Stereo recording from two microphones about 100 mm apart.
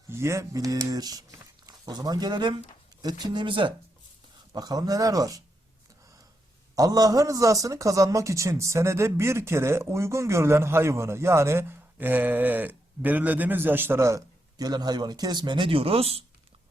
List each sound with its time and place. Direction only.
0.1 s speech: 30° right (ahead or behind); by 3.7 s 55° right (ahead or behind)
4.5 s speech: 40° right (ahead or behind)
6.7 s a man's voice: 40° right (ahead or behind); by 16.2 s 80° right